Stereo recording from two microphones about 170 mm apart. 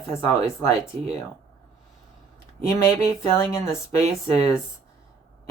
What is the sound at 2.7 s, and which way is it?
A woman's voice, 15° left (ahead or behind).